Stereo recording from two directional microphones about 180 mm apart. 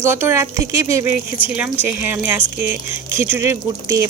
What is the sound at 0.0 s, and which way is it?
Speech, 10° right (ahead or behind).